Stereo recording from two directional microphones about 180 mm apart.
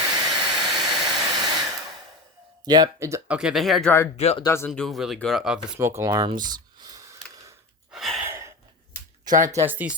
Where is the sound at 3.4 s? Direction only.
Centre (ahead or behind).